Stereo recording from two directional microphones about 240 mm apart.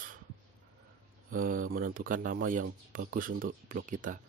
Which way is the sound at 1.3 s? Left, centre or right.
Right.